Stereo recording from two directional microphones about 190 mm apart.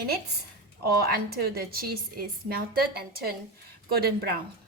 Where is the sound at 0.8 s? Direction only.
55° right (ahead or behind).